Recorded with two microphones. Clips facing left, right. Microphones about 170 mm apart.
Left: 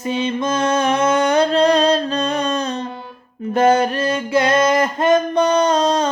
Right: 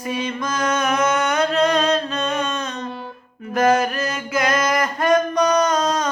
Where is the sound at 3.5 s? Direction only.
30° left (ahead or behind).